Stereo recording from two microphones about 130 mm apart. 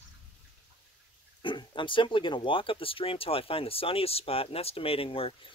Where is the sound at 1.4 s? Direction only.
35° left (ahead or behind).